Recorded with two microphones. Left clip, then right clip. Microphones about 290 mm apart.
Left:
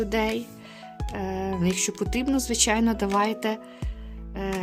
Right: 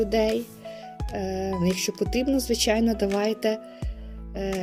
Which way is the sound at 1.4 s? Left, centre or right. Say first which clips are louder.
Even; centre.